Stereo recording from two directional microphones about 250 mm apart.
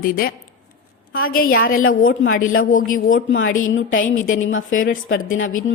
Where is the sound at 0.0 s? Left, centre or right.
Left.